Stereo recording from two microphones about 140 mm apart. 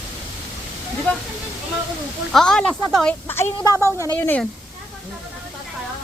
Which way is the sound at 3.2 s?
15° left (ahead or behind).